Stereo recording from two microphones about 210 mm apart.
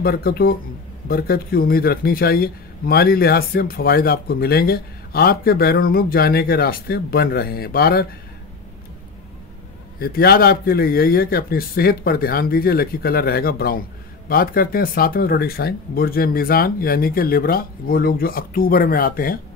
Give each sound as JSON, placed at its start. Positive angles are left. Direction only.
{"t": 0.0, "sound": "a man's voice", "side_deg": 45}
{"t": 9.9, "sound": "a man's voice", "side_deg": 45}